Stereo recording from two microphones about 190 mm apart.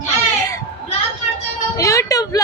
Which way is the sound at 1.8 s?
15° left (ahead or behind).